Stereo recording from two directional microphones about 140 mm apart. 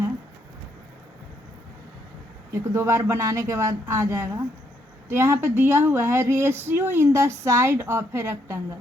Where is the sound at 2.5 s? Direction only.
20° right (ahead or behind).